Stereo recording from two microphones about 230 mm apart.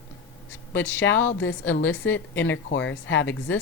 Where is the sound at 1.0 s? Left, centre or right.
Left.